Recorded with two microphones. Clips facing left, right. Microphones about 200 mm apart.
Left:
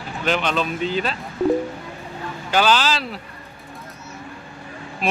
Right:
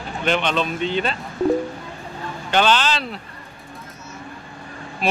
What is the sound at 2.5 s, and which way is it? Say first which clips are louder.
Speech: even; 5° left (ahead or behind).